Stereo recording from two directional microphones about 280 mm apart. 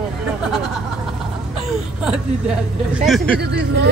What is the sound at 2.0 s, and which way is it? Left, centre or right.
Speech, centre.